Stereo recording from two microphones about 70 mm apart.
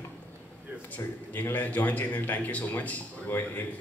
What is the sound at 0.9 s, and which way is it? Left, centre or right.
A man's voice, left.